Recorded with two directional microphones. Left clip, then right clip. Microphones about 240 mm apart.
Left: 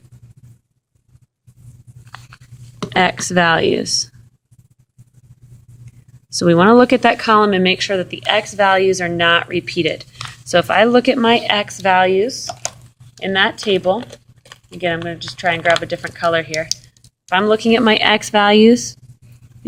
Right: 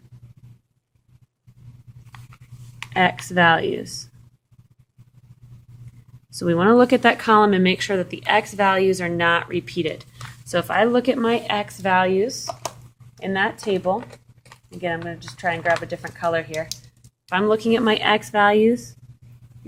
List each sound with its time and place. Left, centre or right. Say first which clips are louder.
2.9 s speech: left 5 dB; left
6.3 s speech: left 6 dB; left